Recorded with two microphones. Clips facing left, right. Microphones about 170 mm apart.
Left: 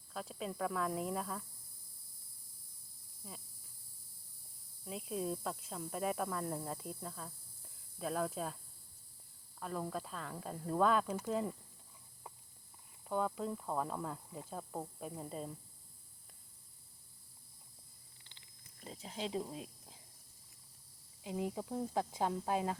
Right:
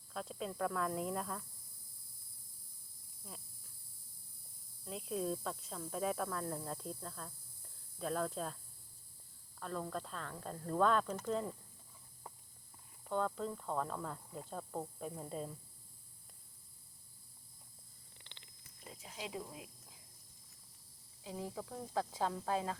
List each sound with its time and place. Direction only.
0.1 s speech: centre (ahead or behind)
3.2 s speech: centre (ahead or behind)
4.9 s speech: 5° left (ahead or behind)
9.6 s speech: 10° left (ahead or behind)
13.1 s speech: 10° left (ahead or behind)
18.2 s purr: 70° right (ahead or behind)
18.9 s speech: 30° left (ahead or behind)
21.2 s speech: 20° left (ahead or behind)